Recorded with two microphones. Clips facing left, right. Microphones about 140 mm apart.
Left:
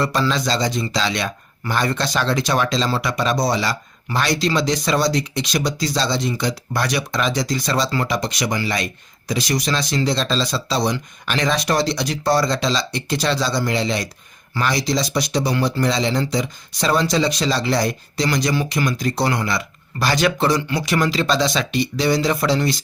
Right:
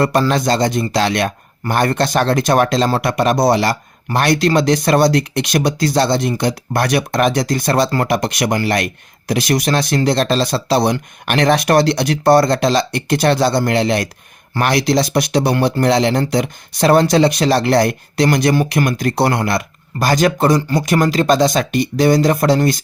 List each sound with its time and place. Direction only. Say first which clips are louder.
0.0 s speech: right 5 dB; 55° right (ahead or behind)